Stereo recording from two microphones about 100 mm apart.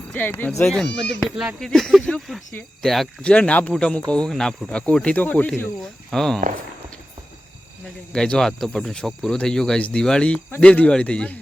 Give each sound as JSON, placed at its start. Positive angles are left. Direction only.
{"t": 0.1, "sound": "speech", "side_deg": 20}
{"t": 0.7, "sound": "speech", "side_deg": 5}
{"t": 5.8, "sound": "speech", "side_deg": 5}
{"t": 8.1, "sound": "speech", "side_deg": 10}